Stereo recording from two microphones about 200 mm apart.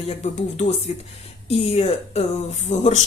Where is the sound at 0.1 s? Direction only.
35° left (ahead or behind).